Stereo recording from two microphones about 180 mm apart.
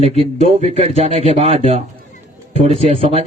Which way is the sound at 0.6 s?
35° right (ahead or behind).